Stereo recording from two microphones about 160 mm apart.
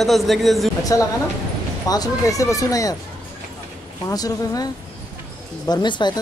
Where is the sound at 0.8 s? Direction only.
20° left (ahead or behind).